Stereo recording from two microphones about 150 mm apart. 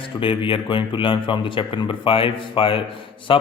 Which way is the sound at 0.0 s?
35° left (ahead or behind).